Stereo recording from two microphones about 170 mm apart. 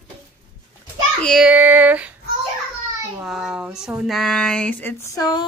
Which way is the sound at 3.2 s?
5° right (ahead or behind).